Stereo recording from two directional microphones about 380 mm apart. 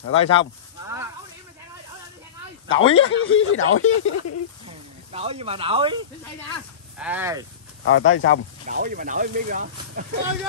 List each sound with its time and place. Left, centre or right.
0.2 s speech: centre
2.7 s speech: left
4.6 s speech: centre
7.8 s speech: left
8.6 s speech: right